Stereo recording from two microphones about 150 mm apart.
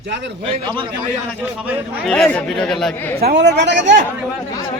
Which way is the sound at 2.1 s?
5° left (ahead or behind).